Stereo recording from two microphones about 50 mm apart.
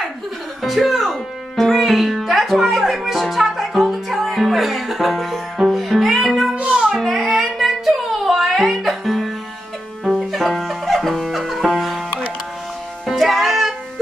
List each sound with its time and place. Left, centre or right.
0.6 s music: centre
6.5 s music: right
7.0 s music: centre
13.0 s music: centre